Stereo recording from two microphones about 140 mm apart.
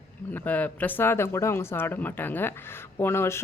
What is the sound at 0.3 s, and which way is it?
Speech, 10° left (ahead or behind).